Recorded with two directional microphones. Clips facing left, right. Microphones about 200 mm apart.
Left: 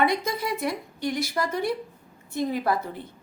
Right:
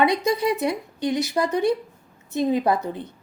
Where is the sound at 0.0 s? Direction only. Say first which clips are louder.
Right 5 dB; 20° right (ahead or behind).